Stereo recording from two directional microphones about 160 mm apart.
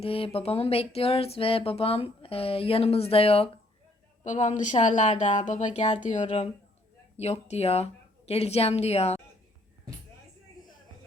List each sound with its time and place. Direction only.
0.0 s speech: 35° left (ahead or behind)
4.2 s speech: 50° left (ahead or behind)